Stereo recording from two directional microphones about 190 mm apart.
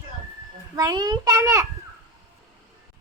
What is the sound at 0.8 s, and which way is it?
Speech, 20° right (ahead or behind).